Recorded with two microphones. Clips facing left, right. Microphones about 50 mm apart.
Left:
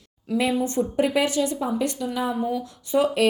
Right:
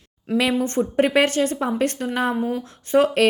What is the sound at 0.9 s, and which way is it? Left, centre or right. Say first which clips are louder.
A woman's voice: right 4 dB; right.